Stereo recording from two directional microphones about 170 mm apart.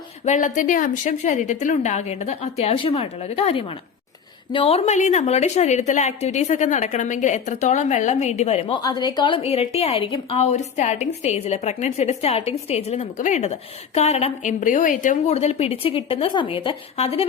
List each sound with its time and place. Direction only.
0.3 s a woman's voice: 45° left (ahead or behind)
8.8 s a woman's voice: 25° left (ahead or behind)